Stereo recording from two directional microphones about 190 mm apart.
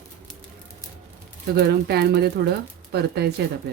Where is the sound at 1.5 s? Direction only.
55° right (ahead or behind).